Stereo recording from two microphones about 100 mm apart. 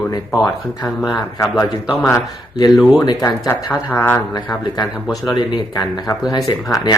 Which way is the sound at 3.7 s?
20° left (ahead or behind).